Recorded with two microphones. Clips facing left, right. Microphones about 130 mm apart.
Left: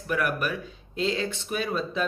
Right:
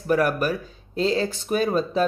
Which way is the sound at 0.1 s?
40° right (ahead or behind).